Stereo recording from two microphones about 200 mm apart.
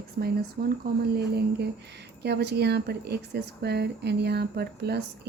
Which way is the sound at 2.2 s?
55° right (ahead or behind).